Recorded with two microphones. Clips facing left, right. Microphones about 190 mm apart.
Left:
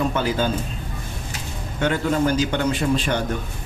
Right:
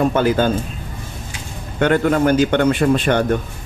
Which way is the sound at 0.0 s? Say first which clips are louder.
Right 6 dB; 55° right (ahead or behind).